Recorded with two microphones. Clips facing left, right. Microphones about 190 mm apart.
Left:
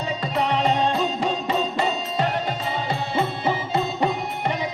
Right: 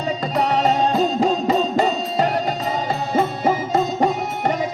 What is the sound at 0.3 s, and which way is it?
Music, 40° right (ahead or behind).